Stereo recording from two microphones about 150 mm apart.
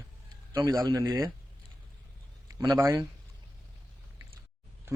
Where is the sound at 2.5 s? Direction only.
20° right (ahead or behind).